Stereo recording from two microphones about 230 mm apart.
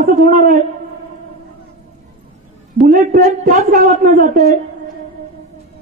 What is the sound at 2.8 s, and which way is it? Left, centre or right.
A man's voice, right.